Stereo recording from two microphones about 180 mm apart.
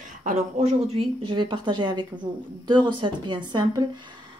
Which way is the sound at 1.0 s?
30° right (ahead or behind).